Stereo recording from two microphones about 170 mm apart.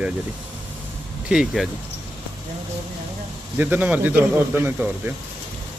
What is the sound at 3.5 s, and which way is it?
Speech, 10° right (ahead or behind).